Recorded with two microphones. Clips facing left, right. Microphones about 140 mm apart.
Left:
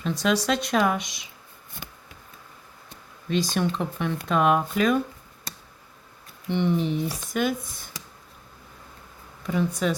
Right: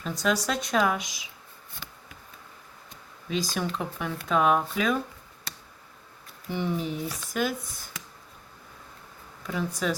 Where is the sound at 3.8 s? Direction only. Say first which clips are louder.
Left 4 dB; 5° right (ahead or behind).